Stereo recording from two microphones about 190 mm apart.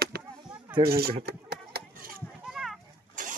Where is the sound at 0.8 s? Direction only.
55° right (ahead or behind).